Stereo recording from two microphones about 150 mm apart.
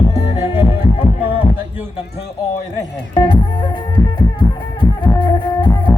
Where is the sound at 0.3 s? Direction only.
20° right (ahead or behind).